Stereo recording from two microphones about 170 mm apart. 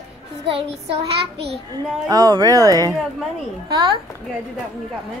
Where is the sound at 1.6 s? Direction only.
25° right (ahead or behind).